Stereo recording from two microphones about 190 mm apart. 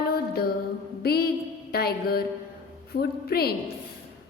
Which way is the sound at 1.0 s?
55° left (ahead or behind).